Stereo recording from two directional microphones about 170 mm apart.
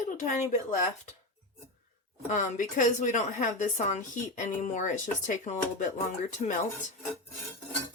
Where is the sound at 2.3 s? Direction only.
45° left (ahead or behind).